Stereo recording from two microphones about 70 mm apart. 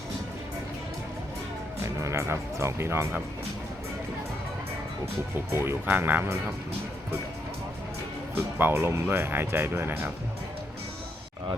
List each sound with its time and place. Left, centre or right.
2.0 s speech: right
5.5 s speech: right
8.5 s speech: right